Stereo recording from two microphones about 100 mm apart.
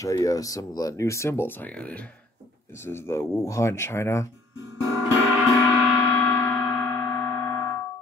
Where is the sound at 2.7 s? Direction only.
25° left (ahead or behind).